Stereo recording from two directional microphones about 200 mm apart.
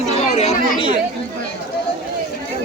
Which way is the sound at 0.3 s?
30° left (ahead or behind).